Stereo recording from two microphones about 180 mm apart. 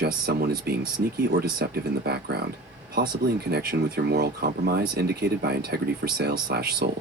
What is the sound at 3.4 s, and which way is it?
Speech, 60° right (ahead or behind).